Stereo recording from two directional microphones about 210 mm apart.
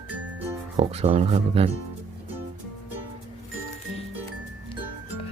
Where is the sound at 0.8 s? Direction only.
30° right (ahead or behind).